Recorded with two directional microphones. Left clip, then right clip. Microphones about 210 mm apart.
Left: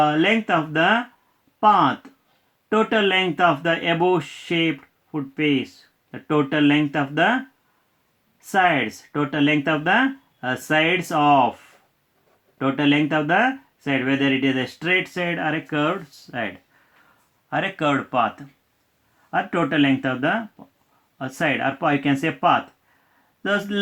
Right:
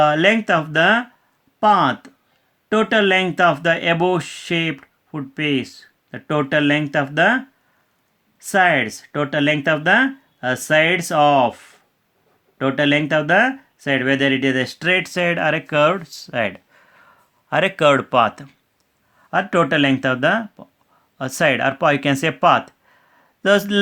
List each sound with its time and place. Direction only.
0.0 s speech: 45° right (ahead or behind)
8.4 s speech: 40° right (ahead or behind)
17.5 s a man's voice: 45° right (ahead or behind)